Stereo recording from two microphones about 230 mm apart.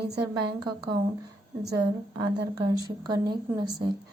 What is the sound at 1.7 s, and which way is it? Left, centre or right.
Speech, centre.